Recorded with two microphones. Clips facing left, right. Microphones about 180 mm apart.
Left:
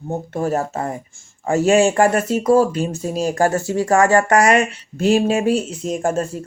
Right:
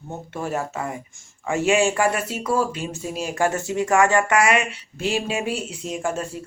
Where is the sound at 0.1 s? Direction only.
40° left (ahead or behind).